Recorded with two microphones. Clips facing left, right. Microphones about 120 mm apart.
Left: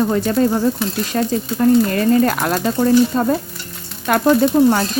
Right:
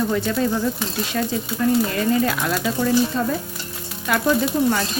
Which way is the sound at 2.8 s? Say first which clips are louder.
Left 6 dB; 40° left (ahead or behind).